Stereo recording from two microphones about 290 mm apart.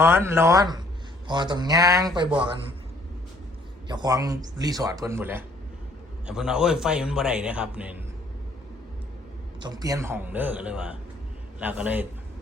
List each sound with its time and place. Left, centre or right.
0.0 s a man's voice: centre
3.8 s a man's voice: centre
9.6 s a man's voice: centre